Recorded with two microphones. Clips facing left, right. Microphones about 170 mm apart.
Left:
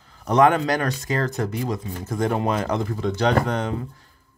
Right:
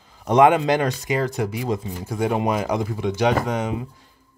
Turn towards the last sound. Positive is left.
turn(degrees=-10)  # may be behind; listen again after turning